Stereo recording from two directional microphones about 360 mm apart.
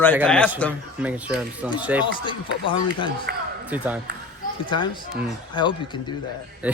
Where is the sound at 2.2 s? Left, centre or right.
Centre.